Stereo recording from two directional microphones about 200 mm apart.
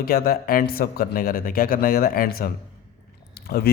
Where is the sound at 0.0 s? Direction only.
50° left (ahead or behind).